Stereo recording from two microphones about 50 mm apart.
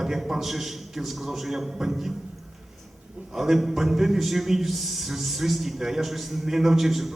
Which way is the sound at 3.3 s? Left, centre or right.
Centre.